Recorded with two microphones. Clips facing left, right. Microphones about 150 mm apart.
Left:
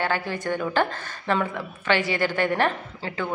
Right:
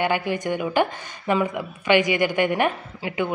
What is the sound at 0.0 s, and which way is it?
A man's voice, 15° right (ahead or behind).